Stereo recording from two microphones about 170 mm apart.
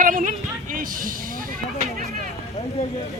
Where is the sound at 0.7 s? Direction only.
55° right (ahead or behind).